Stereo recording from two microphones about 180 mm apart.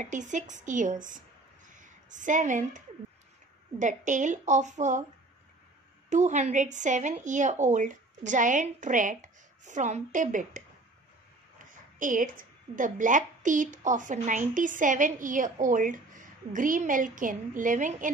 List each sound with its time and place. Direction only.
0.0 s a woman's voice: 45° right (ahead or behind)
3.8 s a woman's voice: 45° right (ahead or behind)
6.0 s a woman's voice: 40° right (ahead or behind)